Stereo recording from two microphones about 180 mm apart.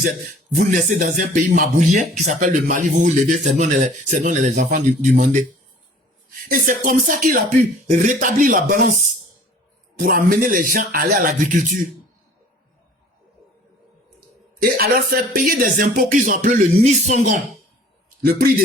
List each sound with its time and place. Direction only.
0.5 s a man's voice: 45° right (ahead or behind)
6.5 s a man's voice: 50° right (ahead or behind)
10.0 s a man's voice: 50° right (ahead or behind)
14.6 s a man's voice: 55° right (ahead or behind); by 17.4 s 40° right (ahead or behind)
18.3 s a man's voice: 55° right (ahead or behind)